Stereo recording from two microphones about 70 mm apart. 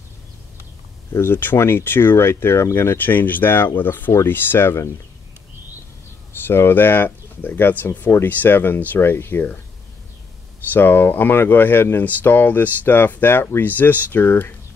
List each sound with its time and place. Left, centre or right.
1.1 s speech: left
6.4 s speech: left
10.7 s speech: left